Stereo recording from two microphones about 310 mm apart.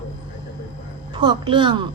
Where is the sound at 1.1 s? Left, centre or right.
Centre.